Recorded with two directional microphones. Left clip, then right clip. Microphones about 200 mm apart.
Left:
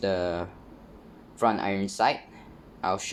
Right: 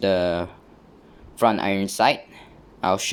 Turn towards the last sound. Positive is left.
turn(degrees=-40)  # may be behind; listen again after turning